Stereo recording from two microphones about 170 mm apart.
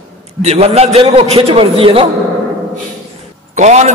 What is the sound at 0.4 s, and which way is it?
A man's voice, 40° right (ahead or behind).